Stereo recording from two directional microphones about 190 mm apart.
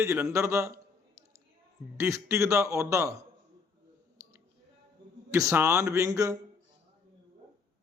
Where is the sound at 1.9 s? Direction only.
15° right (ahead or behind).